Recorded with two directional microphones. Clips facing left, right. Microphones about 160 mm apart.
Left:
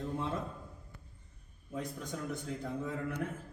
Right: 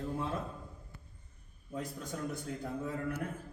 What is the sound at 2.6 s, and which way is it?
Speech, 10° right (ahead or behind).